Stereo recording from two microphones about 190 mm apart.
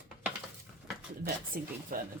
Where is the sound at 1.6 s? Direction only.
50° right (ahead or behind).